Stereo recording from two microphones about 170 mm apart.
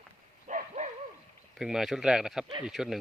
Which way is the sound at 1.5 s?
Centre (ahead or behind).